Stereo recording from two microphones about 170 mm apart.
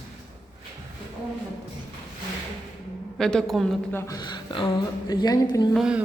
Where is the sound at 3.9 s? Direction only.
15° left (ahead or behind).